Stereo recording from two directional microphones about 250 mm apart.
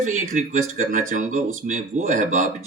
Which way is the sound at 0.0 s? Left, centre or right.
Right.